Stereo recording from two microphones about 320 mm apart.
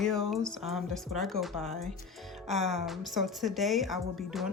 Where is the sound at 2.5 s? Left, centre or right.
Right.